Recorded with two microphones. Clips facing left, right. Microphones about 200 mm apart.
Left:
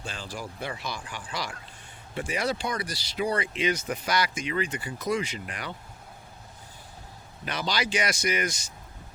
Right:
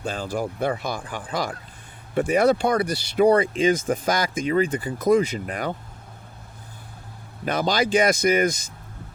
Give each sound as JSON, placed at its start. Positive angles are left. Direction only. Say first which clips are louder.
{"t": 0.0, "sound": "speech", "louder": "right 10 dB", "side_deg": -55}
{"t": 7.4, "sound": "speech", "louder": "right 8 dB", "side_deg": -50}